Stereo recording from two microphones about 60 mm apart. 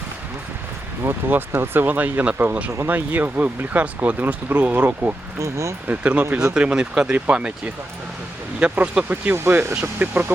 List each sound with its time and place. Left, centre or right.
1.0 s speech: right
5.4 s speech: right
5.9 s speech: right
9.3 s speech: right
10.0 s speech: right